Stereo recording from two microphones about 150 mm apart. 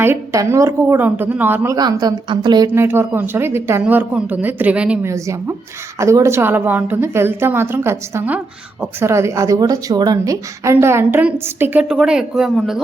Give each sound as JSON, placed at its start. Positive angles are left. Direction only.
{"t": 0.0, "sound": "speech", "side_deg": -20}
{"t": 2.7, "sound": "speech", "side_deg": -15}
{"t": 5.1, "sound": "speech", "side_deg": -20}